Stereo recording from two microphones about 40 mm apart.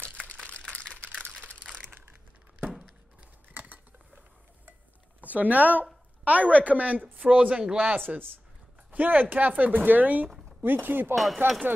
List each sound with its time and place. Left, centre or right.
0.5 s typing: left
3.4 s cutlery: right
5.2 s a woman's voice: right
7.7 s speech: right
10.6 s speech: right